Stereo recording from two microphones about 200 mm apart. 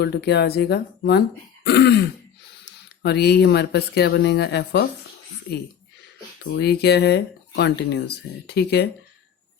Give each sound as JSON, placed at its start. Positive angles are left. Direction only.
{"t": 0.0, "sound": "speech", "side_deg": 55}
{"t": 3.0, "sound": "speech", "side_deg": 55}
{"t": 6.5, "sound": "speech", "side_deg": 55}